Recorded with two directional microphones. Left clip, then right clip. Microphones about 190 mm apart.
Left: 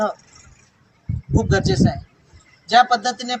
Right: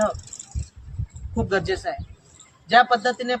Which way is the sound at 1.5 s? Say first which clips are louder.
Left 3 dB; centre (ahead or behind).